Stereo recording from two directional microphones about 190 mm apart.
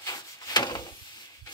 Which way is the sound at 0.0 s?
20° left (ahead or behind).